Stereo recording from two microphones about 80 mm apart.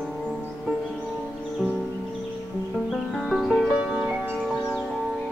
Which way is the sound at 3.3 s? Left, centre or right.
Centre.